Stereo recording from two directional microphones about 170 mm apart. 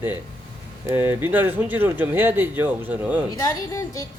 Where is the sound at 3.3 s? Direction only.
20° left (ahead or behind).